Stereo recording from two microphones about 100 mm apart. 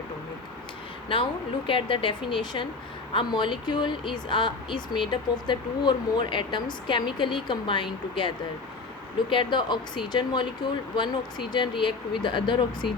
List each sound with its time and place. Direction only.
1.6 s speech: 60° left (ahead or behind)
9.3 s speech: 55° left (ahead or behind)